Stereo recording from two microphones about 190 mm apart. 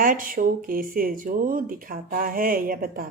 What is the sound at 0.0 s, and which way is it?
Speech, 45° right (ahead or behind).